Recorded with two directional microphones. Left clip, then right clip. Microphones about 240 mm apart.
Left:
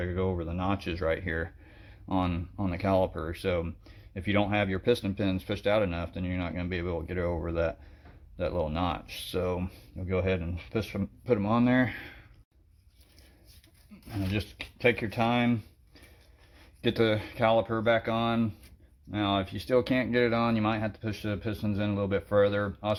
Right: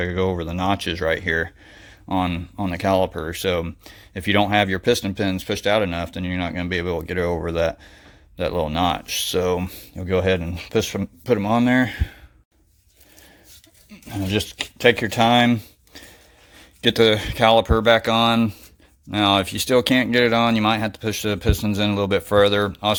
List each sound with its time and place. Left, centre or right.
0.0 s speech: right
14.3 s speech: right